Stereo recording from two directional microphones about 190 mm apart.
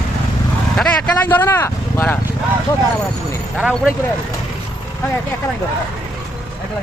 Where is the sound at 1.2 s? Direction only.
10° left (ahead or behind).